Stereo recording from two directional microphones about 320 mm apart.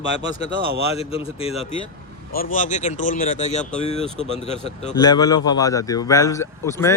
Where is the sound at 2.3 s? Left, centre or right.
Left.